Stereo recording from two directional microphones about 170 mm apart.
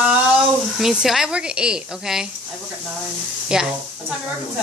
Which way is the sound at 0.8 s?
Centre (ahead or behind).